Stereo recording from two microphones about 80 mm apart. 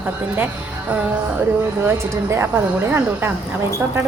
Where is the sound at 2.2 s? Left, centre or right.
Right.